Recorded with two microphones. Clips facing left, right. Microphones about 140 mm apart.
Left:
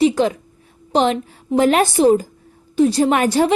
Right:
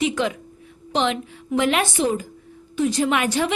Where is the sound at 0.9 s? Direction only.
40° left (ahead or behind).